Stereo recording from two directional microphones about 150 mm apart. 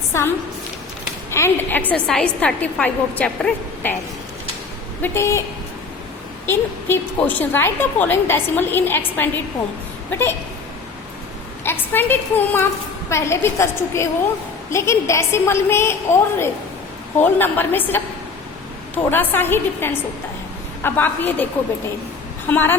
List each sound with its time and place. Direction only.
0.1 s a woman's voice: 15° left (ahead or behind)
5.0 s a woman's voice: 20° left (ahead or behind)
6.5 s a woman's voice: 15° left (ahead or behind)
11.6 s a woman's voice: 15° left (ahead or behind)
19.1 s a woman's voice: 15° left (ahead or behind)
22.4 s a woman's voice: 15° left (ahead or behind)